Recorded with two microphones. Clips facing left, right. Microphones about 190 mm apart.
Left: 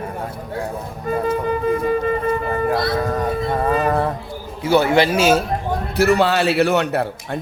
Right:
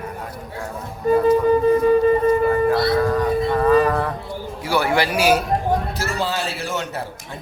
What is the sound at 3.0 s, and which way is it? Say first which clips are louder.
Music: right 2 dB; 25° left (ahead or behind).